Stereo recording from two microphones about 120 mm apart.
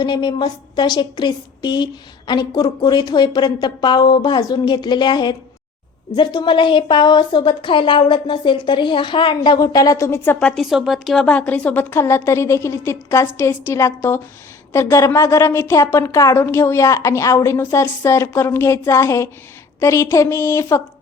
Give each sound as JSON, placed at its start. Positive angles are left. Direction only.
{"t": 0.0, "sound": "a woman's voice", "side_deg": 40}
{"t": 10.4, "sound": "a woman's voice", "side_deg": 0}